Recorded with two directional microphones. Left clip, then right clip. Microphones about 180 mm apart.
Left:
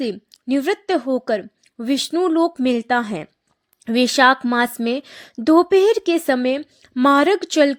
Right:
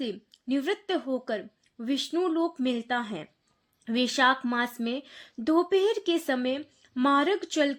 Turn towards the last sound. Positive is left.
turn(degrees=40)  # may be behind; listen again after turning